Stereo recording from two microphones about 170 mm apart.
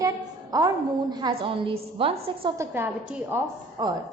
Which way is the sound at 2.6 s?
10° right (ahead or behind).